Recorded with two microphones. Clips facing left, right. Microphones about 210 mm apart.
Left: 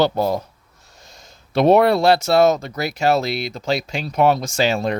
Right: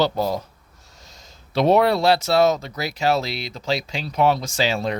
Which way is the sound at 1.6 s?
55° left (ahead or behind).